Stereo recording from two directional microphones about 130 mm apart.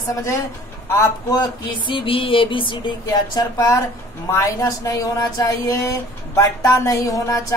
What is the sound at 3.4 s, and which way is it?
Speech, 25° left (ahead or behind).